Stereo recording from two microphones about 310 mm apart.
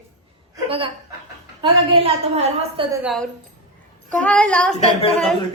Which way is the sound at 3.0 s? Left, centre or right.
Centre.